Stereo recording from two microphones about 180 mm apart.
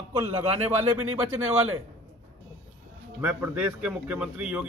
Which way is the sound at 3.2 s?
10° right (ahead or behind).